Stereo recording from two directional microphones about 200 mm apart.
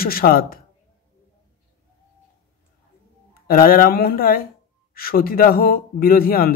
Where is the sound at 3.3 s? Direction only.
45° left (ahead or behind).